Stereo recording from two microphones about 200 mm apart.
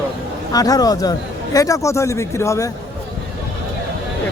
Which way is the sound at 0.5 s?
20° left (ahead or behind).